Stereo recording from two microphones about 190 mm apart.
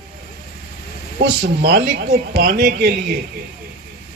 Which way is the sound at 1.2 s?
55° right (ahead or behind).